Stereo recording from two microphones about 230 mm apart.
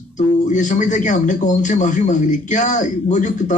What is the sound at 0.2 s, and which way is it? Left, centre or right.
A man's voice, left.